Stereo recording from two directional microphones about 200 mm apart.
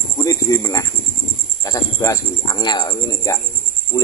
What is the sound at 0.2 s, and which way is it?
Speech, 15° left (ahead or behind).